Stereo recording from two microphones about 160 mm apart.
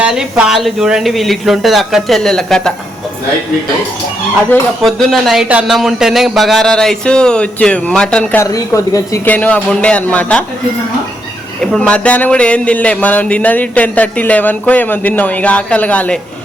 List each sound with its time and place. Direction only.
0.0 s speech: 5° right (ahead or behind)
4.8 s speech: centre (ahead or behind)
8.4 s a man's voice: 20° left (ahead or behind)
11.6 s a man's voice: 5° left (ahead or behind)